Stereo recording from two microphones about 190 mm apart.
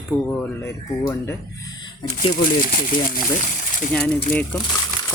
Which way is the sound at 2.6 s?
50° left (ahead or behind).